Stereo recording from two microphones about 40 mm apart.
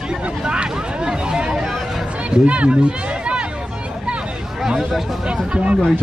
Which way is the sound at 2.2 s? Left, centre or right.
Right.